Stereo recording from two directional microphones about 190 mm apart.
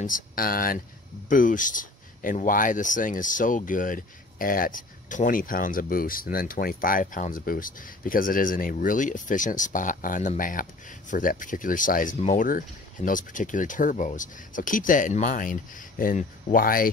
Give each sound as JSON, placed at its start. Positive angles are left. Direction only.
{"t": 0.0, "sound": "speech", "side_deg": 45}